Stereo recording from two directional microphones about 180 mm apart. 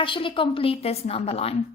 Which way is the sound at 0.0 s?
30° left (ahead or behind).